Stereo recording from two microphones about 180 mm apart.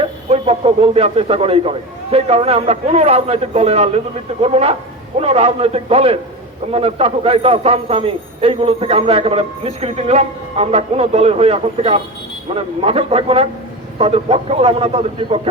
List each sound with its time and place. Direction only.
0.0 s a man's voice: 35° right (ahead or behind)